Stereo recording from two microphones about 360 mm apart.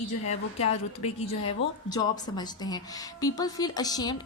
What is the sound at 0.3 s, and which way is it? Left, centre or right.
A woman's voice, centre.